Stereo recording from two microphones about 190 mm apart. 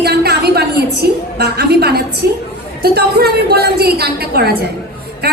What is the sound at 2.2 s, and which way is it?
A woman's voice, 55° right (ahead or behind).